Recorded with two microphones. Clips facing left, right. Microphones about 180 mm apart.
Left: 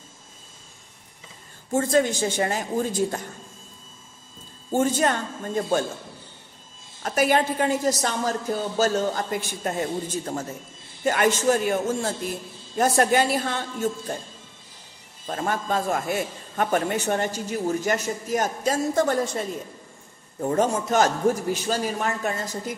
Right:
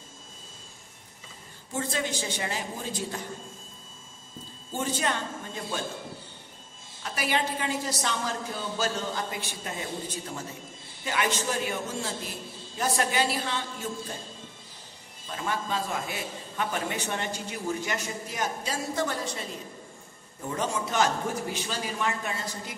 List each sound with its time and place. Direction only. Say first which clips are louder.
1.7 s a man's voice: left 10 dB; 45° left (ahead or behind)
4.6 s a man's voice: left 8 dB; 45° left (ahead or behind)
7.0 s a man's voice: left 8 dB; 50° left (ahead or behind)
15.2 s a man's voice: left 5 dB; 50° left (ahead or behind)